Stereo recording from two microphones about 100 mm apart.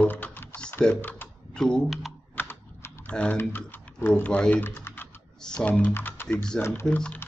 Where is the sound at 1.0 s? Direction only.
20° left (ahead or behind).